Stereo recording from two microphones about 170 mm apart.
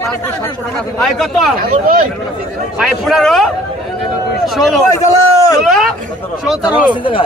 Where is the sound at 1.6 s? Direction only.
55° right (ahead or behind).